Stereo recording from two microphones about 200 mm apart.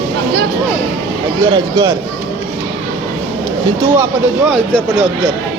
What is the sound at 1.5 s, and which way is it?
Speech, 25° right (ahead or behind).